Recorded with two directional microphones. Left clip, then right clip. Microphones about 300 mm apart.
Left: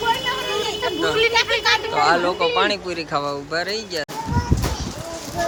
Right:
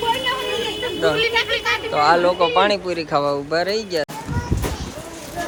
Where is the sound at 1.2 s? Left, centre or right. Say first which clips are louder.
Left 1 dB; left.